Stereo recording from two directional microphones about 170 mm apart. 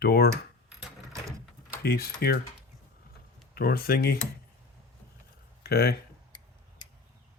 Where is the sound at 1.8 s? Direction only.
65° left (ahead or behind).